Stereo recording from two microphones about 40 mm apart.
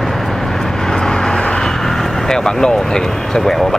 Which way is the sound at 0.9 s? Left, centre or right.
Centre.